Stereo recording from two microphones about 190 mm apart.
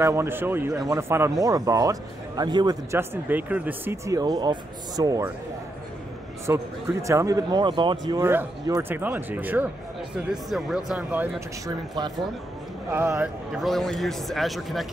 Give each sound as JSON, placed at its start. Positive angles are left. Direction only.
{"t": 0.0, "sound": "a man's voice", "side_deg": -15}
{"t": 6.4, "sound": "speech", "side_deg": -15}
{"t": 8.1, "sound": "a man's voice", "side_deg": -10}